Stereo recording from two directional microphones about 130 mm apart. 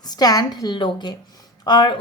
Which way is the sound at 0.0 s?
30° left (ahead or behind).